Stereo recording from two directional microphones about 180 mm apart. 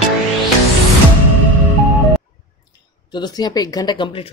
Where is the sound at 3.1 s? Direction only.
25° left (ahead or behind).